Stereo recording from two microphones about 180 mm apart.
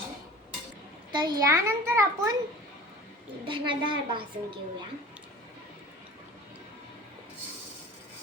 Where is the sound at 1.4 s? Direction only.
15° right (ahead or behind).